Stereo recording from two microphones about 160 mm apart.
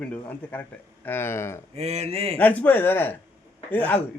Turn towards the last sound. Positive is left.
turn(degrees=10)  # may be behind; listen again after turning